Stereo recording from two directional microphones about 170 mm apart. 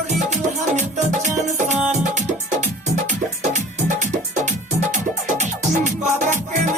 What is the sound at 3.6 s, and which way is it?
Music, 45° right (ahead or behind).